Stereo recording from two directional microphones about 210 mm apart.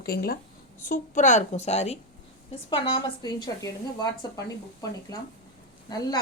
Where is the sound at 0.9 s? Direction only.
35° left (ahead or behind).